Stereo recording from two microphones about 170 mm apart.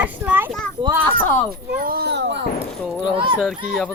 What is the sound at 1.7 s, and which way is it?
Speech, 60° right (ahead or behind).